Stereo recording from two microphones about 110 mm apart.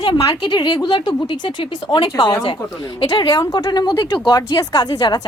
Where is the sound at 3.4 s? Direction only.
35° left (ahead or behind).